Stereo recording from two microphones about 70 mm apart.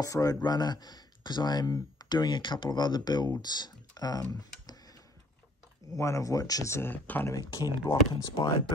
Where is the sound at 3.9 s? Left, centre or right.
Left.